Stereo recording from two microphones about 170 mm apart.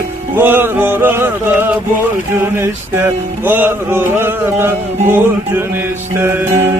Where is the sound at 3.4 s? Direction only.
10° right (ahead or behind).